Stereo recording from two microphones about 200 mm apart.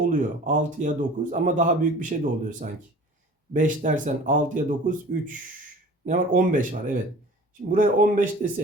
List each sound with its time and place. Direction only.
0.1 s a man's voice: 40° right (ahead or behind)